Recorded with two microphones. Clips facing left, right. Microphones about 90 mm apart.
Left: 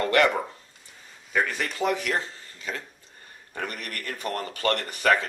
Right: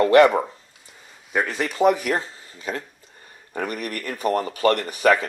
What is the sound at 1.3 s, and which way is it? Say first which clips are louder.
Speech: right 3 dB; 5° right (ahead or behind).